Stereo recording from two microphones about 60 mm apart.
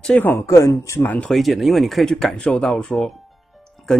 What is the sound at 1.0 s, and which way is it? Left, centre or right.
Speech, left.